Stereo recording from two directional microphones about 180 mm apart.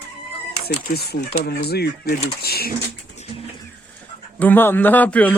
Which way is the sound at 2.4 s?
60° left (ahead or behind).